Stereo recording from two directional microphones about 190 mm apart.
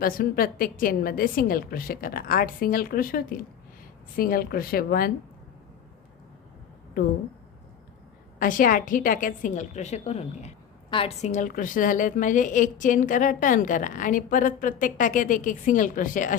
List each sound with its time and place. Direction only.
0.0 s a woman's voice: 50° left (ahead or behind)
8.4 s a woman's voice: 45° left (ahead or behind)